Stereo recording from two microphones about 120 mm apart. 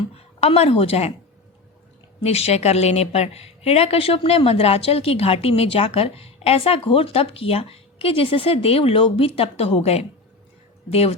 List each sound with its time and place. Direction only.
0.3 s a woman's voice: 55° left (ahead or behind)
2.2 s a woman's voice: 60° left (ahead or behind)